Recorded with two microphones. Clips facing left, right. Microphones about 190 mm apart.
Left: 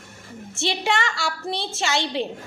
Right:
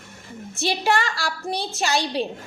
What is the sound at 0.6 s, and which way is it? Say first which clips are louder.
A woman's voice: right 2 dB; 25° left (ahead or behind).